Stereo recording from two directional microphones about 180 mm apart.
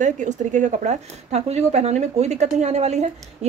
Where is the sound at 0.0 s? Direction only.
45° right (ahead or behind).